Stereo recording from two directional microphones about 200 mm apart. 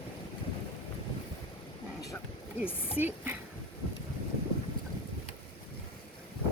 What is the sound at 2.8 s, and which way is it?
Speech, 10° right (ahead or behind).